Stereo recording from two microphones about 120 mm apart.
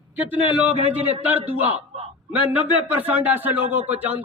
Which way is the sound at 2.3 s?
15° right (ahead or behind).